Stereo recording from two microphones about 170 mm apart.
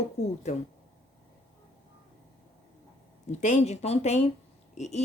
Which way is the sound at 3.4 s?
45° left (ahead or behind).